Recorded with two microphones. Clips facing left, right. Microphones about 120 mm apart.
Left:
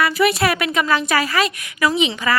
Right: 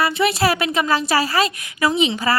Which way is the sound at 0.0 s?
25° right (ahead or behind).